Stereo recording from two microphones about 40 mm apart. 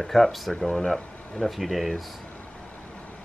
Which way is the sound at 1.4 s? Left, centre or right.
Centre.